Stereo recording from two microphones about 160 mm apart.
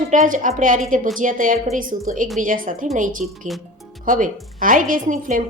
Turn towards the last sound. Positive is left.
turn(degrees=-55)  # may be behind; listen again after turning